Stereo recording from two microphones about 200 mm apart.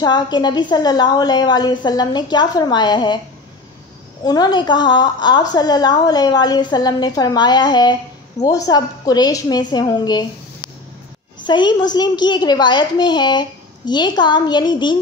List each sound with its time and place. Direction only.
0.0 s a woman's voice: 20° left (ahead or behind)
4.2 s a woman's voice: 20° left (ahead or behind)